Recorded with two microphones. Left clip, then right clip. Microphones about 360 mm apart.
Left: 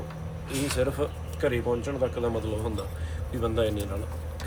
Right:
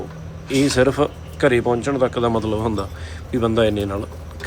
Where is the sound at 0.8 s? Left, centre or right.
Centre.